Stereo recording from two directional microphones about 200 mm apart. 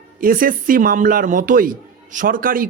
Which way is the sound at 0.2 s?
45° right (ahead or behind).